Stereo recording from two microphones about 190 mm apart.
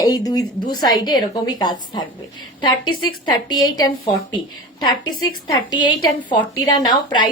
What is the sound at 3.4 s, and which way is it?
A woman's voice, 20° left (ahead or behind).